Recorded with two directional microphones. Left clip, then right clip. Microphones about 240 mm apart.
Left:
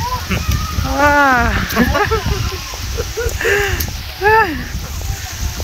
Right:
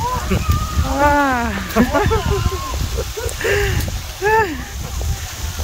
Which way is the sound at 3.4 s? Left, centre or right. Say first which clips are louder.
Left 3 dB; centre.